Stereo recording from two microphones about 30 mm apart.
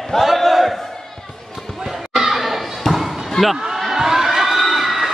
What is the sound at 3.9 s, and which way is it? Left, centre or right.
Crowd, centre.